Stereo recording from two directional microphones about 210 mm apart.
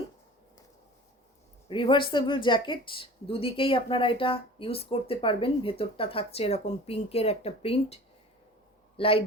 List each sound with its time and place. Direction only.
1.6 s a woman's voice: 25° left (ahead or behind)
9.0 s a man's voice: 25° left (ahead or behind)